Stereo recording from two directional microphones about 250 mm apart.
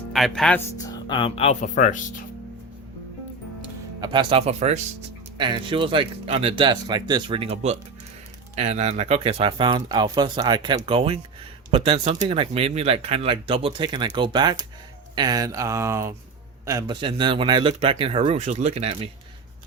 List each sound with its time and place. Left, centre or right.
0.1 s speech: centre
1.0 s speech: centre
4.0 s speech: centre